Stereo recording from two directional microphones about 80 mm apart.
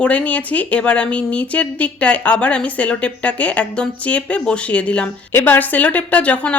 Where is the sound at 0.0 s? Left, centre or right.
Centre.